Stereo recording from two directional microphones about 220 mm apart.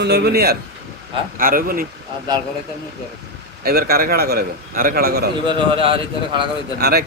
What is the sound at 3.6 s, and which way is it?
A man's voice, 45° right (ahead or behind).